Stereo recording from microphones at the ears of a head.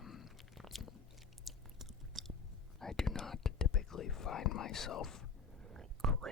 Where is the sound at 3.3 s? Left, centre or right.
Left.